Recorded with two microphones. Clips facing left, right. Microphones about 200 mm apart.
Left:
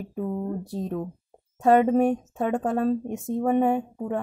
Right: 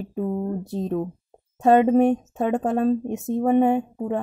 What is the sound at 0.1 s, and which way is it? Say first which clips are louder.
Speech: right 3 dB; 30° right (ahead or behind).